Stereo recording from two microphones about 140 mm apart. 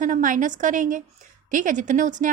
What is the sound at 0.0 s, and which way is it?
A woman's voice, 70° right (ahead or behind).